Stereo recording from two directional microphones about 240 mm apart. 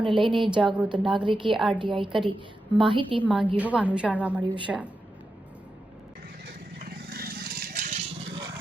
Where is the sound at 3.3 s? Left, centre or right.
Centre.